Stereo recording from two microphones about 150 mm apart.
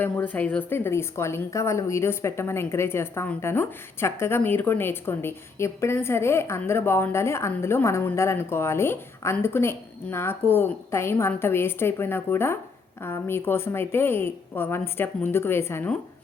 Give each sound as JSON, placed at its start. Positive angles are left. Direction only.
{"t": 0.0, "sound": "a woman's voice", "side_deg": 10}